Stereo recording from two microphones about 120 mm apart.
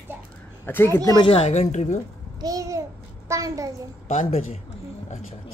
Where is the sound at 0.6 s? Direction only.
20° left (ahead or behind).